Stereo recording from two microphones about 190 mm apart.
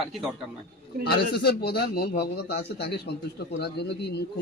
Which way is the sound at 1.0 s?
60° left (ahead or behind).